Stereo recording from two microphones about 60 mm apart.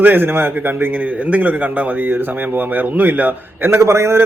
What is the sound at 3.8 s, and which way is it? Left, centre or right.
Speech, right.